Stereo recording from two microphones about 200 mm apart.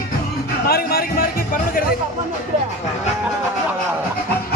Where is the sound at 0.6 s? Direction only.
50° left (ahead or behind).